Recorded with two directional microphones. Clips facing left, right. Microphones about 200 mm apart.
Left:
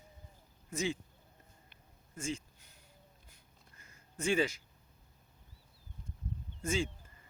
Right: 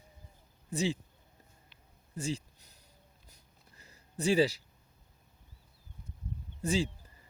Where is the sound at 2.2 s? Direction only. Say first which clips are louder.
Right 3 dB; 35° right (ahead or behind).